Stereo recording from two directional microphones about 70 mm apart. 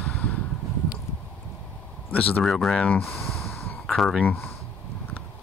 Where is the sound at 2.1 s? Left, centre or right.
Left.